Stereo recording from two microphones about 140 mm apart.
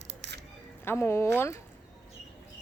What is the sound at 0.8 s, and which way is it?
Speech, 15° left (ahead or behind).